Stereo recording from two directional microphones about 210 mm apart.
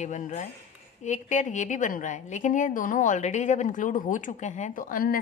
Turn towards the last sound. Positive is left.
turn(degrees=40)  # may be behind; listen again after turning